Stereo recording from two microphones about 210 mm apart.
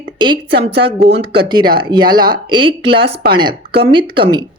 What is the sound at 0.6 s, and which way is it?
A woman's voice, 25° right (ahead or behind).